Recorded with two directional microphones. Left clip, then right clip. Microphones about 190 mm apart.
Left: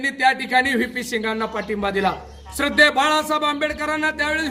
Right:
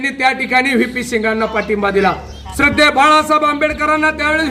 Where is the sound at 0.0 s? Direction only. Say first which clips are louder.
Right 4 dB; 15° left (ahead or behind).